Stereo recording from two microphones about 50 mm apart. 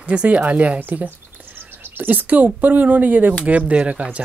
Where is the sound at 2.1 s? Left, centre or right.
Right.